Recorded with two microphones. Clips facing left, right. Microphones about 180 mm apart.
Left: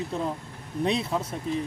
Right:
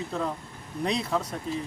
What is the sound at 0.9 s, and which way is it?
Speech, centre (ahead or behind).